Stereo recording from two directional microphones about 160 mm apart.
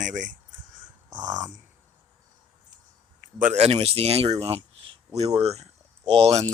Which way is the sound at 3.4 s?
45° right (ahead or behind).